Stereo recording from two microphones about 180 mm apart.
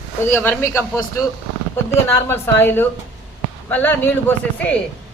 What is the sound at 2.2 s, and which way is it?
Speech, 15° left (ahead or behind).